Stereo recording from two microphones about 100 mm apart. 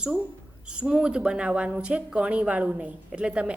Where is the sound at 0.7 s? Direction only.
10° right (ahead or behind).